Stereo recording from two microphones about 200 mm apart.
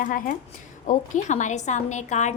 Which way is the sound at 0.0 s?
45° left (ahead or behind).